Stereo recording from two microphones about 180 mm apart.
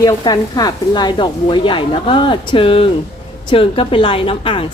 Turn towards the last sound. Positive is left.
turn(degrees=30)  # may be behind; listen again after turning